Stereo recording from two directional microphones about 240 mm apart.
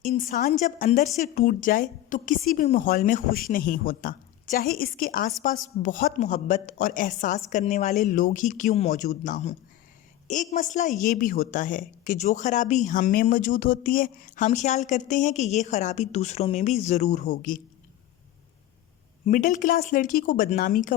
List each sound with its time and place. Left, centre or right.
0.0 s a woman's voice: left
19.2 s a woman's voice: left